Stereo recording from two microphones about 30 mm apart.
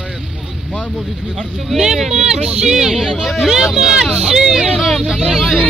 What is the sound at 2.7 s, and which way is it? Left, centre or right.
Speech, centre.